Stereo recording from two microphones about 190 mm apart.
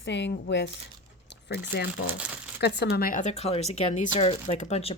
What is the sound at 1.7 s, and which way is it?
Speech, 60° left (ahead or behind).